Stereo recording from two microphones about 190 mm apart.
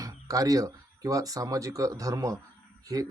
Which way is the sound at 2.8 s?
20° right (ahead or behind).